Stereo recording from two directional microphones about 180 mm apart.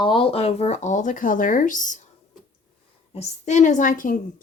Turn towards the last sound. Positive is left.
turn(degrees=45)  # may be behind; listen again after turning